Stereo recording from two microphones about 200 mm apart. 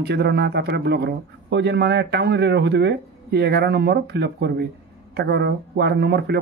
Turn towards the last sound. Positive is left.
turn(degrees=-55)  # may be behind; listen again after turning